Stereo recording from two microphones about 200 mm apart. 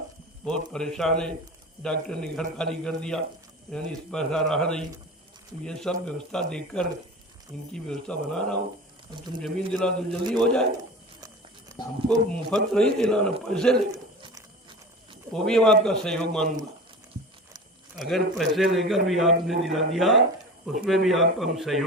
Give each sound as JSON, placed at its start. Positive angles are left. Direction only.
{"t": 0.4, "sound": "a man's voice", "side_deg": 5}
{"t": 11.7, "sound": "a sound", "side_deg": -20}
{"t": 12.0, "sound": "a man's voice", "side_deg": 5}
{"t": 13.9, "sound": "a sound", "side_deg": -20}
{"t": 15.3, "sound": "a man's voice", "side_deg": 5}
{"t": 17.9, "sound": "a man's voice", "side_deg": 0}